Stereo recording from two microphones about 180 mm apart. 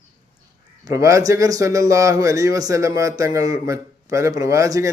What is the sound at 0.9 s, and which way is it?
Speech, 15° right (ahead or behind).